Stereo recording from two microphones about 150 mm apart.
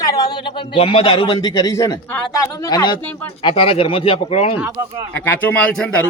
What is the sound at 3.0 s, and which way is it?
Speech, 15° left (ahead or behind).